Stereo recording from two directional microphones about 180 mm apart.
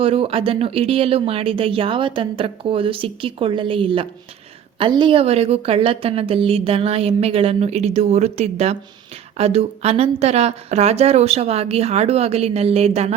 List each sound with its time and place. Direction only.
0.0 s a woman's voice: 30° right (ahead or behind)